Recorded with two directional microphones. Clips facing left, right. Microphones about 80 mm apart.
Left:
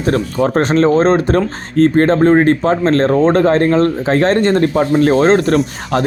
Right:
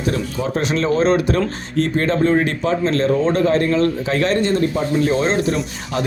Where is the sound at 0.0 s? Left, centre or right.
Left.